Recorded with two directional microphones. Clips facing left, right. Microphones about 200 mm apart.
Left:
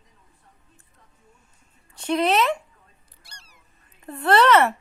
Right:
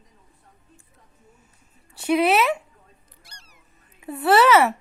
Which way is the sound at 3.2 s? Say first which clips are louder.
Left 2 dB; 30° left (ahead or behind).